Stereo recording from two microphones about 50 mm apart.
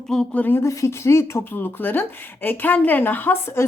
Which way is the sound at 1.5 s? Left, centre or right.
Left.